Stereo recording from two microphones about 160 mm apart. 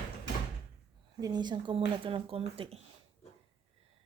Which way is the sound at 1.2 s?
25° right (ahead or behind).